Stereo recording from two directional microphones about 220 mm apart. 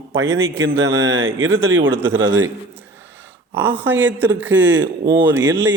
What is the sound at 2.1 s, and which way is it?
Speech, 60° right (ahead or behind).